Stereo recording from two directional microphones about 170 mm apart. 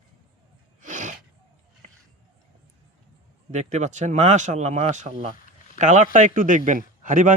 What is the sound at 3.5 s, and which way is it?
Speech, 45° right (ahead or behind).